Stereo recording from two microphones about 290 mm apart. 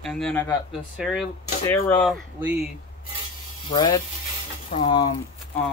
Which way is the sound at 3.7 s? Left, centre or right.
Centre.